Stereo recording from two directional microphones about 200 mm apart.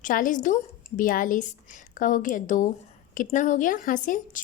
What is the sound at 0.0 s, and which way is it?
A woman's voice, 40° left (ahead or behind).